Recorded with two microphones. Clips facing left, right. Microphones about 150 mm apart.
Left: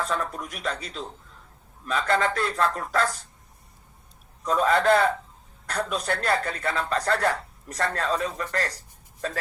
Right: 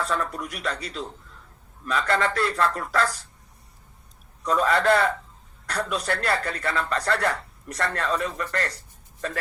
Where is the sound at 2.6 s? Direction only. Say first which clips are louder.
Left 1 dB; 35° left (ahead or behind).